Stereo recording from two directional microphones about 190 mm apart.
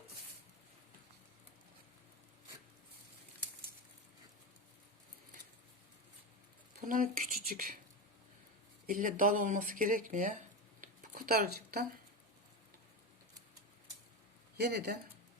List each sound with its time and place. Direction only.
6.8 s speech: 45° right (ahead or behind)
8.9 s speech: 45° right (ahead or behind)
14.6 s speech: 55° right (ahead or behind)